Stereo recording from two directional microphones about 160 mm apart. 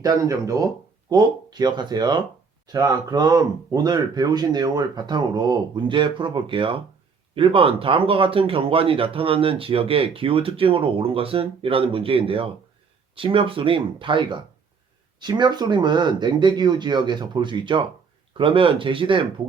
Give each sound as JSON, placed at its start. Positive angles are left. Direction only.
{"t": 0.0, "sound": "speech", "side_deg": -20}